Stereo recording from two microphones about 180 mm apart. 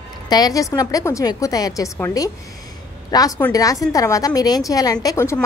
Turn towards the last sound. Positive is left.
turn(degrees=15)  # may be behind; listen again after turning